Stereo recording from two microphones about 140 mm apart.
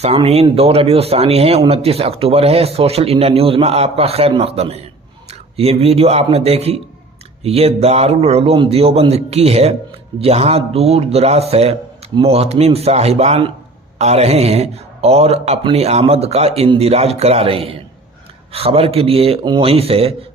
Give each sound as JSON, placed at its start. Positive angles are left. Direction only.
{"t": 0.0, "sound": "speech", "side_deg": -45}